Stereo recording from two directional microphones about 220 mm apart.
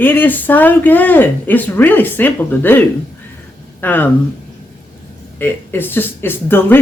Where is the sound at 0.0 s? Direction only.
10° left (ahead or behind).